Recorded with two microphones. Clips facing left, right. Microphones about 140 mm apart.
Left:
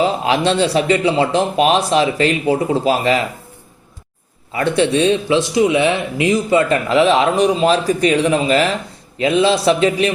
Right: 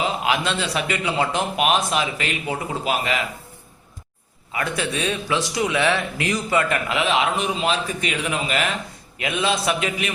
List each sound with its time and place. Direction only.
0.0 s speech: 35° left (ahead or behind)
4.5 s speech: 30° left (ahead or behind)